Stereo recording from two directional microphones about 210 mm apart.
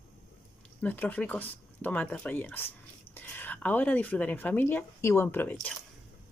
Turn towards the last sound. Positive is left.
turn(degrees=10)  # may be behind; listen again after turning